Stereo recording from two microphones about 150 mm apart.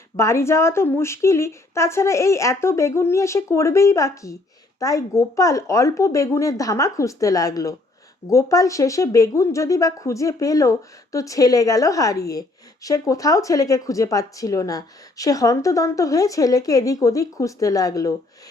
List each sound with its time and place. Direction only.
0.2 s speech: 20° left (ahead or behind)